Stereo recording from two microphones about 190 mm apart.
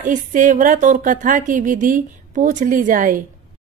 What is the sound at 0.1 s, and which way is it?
Speech, 45° right (ahead or behind).